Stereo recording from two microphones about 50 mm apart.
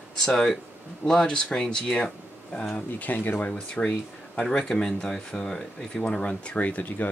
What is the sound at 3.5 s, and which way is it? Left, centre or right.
Speech, centre.